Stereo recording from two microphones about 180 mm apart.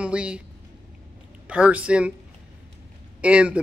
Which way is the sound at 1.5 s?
5° right (ahead or behind).